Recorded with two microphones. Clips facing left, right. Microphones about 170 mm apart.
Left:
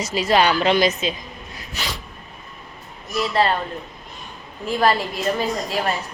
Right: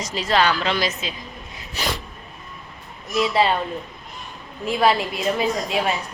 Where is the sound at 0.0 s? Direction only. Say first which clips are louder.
Left 2 dB; 10° left (ahead or behind).